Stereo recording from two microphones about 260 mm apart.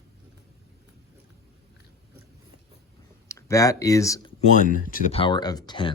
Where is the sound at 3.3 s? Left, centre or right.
Centre.